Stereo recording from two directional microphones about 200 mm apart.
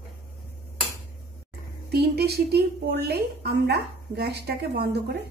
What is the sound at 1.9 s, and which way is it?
A woman's voice, 55° right (ahead or behind).